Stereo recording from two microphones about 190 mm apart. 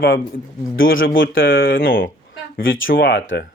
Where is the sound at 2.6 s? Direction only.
90° left.